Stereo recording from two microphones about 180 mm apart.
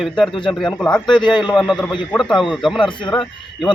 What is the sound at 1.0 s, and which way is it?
Speech, 25° left (ahead or behind).